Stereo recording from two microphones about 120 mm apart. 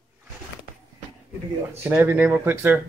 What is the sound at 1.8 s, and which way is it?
Speech, 20° right (ahead or behind).